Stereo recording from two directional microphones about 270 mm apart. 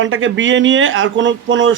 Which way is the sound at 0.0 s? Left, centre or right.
Right.